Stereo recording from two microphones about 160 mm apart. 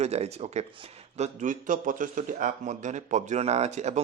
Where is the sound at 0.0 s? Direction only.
45° right (ahead or behind).